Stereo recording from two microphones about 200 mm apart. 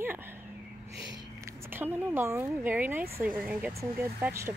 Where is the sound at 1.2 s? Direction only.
15° right (ahead or behind).